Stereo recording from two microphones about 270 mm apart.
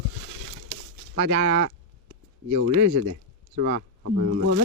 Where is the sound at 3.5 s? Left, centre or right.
Right.